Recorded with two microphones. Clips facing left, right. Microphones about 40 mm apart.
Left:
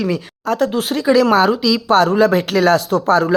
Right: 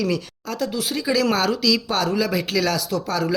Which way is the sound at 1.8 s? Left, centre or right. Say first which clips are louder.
Left 10 dB; left.